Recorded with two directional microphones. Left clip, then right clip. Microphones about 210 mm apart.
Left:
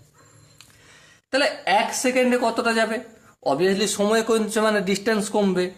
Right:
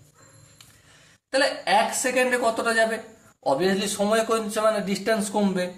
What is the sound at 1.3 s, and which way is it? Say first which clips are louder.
Speech: left 1 dB; 40° left (ahead or behind).